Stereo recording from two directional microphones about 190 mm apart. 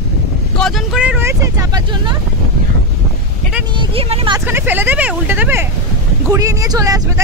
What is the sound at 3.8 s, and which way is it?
Speech, 30° right (ahead or behind).